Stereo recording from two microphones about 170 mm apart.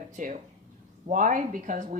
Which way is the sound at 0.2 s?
50° right (ahead or behind).